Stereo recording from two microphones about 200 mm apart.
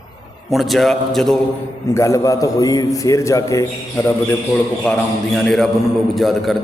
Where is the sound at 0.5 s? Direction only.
Centre (ahead or behind).